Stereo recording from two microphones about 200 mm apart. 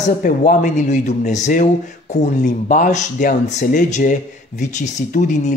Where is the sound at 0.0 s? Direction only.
40° left (ahead or behind).